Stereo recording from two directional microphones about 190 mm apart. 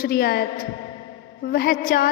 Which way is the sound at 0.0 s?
55° left (ahead or behind).